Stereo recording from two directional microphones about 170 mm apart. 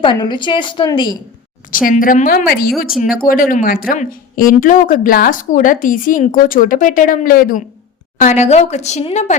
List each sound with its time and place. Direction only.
0.0 s a woman's voice: 25° left (ahead or behind)
1.7 s a woman's voice: 55° left (ahead or behind)
8.2 s speech: 45° left (ahead or behind)